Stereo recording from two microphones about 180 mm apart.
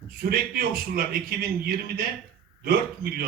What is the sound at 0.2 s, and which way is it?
A man's voice, 55° right (ahead or behind).